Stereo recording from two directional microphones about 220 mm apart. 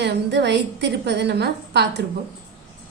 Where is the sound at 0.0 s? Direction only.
50° right (ahead or behind).